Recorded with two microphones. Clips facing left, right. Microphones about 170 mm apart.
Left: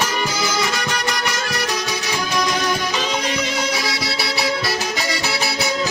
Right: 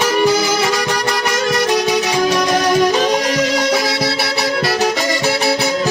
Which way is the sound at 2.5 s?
45° right (ahead or behind).